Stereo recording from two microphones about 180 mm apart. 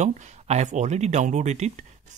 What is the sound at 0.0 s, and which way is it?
Speech, 40° right (ahead or behind).